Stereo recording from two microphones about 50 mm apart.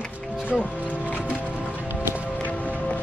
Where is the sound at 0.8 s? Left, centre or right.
Left.